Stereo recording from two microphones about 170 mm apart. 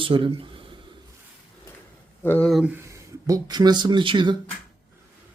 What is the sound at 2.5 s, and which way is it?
Speech, centre (ahead or behind).